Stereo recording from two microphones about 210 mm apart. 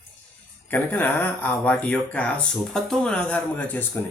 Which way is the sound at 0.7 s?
10° left (ahead or behind).